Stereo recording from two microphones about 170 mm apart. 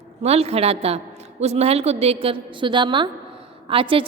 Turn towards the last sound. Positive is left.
turn(degrees=-30)  # may be behind; listen again after turning